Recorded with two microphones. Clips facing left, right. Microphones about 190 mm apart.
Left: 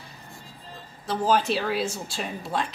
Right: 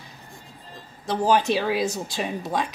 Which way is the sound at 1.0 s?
15° right (ahead or behind).